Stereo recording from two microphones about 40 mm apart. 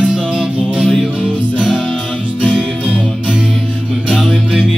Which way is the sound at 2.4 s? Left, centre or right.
Right.